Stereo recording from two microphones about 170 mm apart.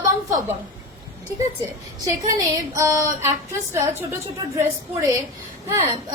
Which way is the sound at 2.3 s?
20° right (ahead or behind).